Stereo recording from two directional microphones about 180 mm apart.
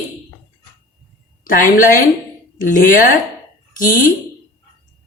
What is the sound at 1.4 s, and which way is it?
A woman's voice, 50° left (ahead or behind).